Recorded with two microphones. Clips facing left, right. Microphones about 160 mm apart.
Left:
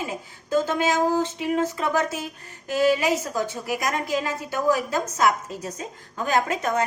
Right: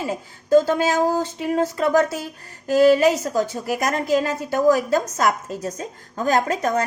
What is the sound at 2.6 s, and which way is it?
A child's voice, 40° right (ahead or behind).